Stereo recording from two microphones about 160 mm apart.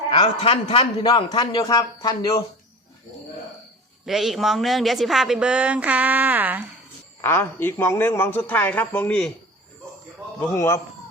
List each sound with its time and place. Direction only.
0.2 s a man's voice: 35° left (ahead or behind)
4.0 s speech: centre (ahead or behind)
7.2 s speech: 15° left (ahead or behind)
10.4 s speech: 15° left (ahead or behind)